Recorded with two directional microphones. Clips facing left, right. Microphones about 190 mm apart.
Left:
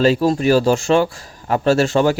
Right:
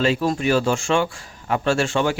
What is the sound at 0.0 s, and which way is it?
A man's voice, 35° left (ahead or behind).